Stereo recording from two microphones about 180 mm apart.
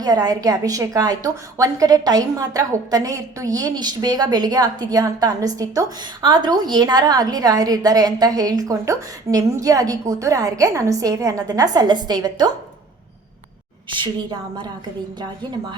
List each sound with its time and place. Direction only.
0.0 s a woman's voice: 20° right (ahead or behind)
13.9 s a woman's voice: 25° right (ahead or behind)